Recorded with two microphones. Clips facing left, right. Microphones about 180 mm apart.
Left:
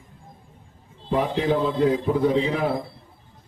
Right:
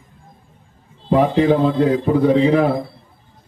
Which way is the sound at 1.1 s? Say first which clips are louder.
Right 8 dB; 90° right.